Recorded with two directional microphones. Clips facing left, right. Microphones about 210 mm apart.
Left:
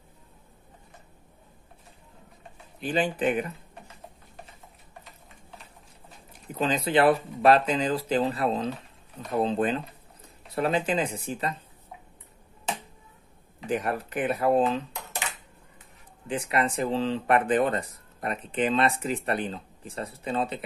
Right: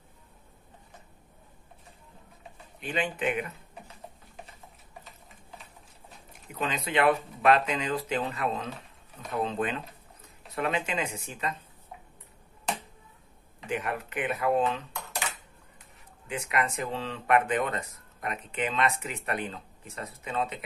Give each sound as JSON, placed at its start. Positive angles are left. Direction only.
{"t": 2.8, "sound": "speech", "side_deg": 35}
{"t": 3.5, "sound": "typing", "side_deg": 0}
{"t": 5.0, "sound": "a sound", "side_deg": 0}
{"t": 6.6, "sound": "speech", "side_deg": 35}
{"t": 8.6, "sound": "typewriter", "side_deg": 0}
{"t": 9.3, "sound": "speech", "side_deg": 30}
{"t": 13.7, "sound": "speech", "side_deg": 35}
{"t": 14.9, "sound": "dishes", "side_deg": 20}
{"t": 16.3, "sound": "speech", "side_deg": 30}